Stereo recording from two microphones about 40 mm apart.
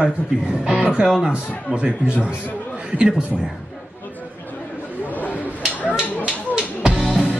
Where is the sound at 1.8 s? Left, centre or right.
Right.